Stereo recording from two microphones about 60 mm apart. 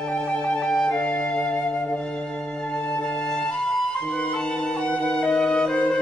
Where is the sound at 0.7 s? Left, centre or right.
Centre.